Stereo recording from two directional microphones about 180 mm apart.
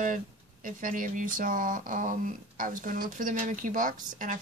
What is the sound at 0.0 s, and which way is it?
Speech, 45° right (ahead or behind).